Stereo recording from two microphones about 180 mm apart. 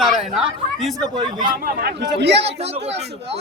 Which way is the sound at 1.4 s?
55° right (ahead or behind).